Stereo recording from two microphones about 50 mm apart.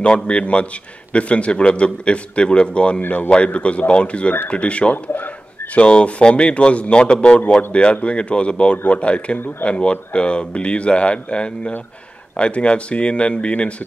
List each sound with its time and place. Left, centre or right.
0.0 s speech: left
3.0 s speech: left
5.8 s speech: left